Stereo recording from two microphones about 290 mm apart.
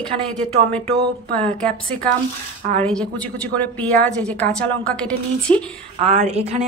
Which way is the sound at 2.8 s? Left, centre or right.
Centre.